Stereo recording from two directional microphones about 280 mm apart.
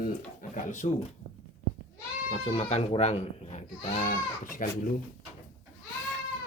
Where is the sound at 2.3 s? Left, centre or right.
Centre.